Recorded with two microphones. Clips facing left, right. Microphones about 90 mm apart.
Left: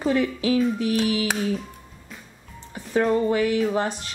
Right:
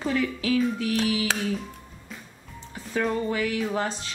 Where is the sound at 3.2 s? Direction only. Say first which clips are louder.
Left 5 dB; 20° left (ahead or behind).